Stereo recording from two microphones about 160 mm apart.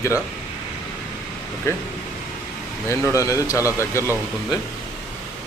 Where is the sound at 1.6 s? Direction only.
15° left (ahead or behind).